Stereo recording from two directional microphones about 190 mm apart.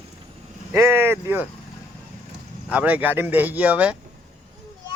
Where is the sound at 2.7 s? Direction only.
5° right (ahead or behind).